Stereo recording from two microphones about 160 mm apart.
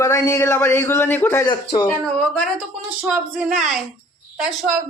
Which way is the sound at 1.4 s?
30° left (ahead or behind).